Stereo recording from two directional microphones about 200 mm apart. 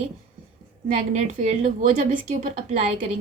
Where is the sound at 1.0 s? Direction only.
40° right (ahead or behind).